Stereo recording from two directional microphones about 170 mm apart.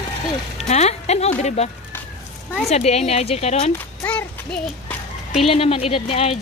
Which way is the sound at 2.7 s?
40° left (ahead or behind).